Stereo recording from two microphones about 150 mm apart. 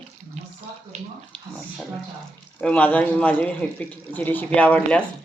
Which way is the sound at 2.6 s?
10° left (ahead or behind).